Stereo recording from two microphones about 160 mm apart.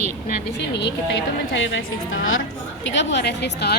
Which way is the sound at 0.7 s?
90° left.